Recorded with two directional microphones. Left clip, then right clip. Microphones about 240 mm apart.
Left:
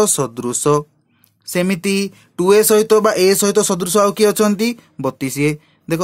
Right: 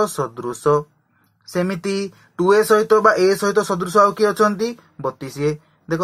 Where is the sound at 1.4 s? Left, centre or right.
Left.